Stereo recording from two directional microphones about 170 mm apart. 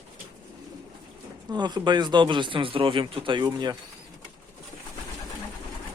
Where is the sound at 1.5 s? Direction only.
25° right (ahead or behind).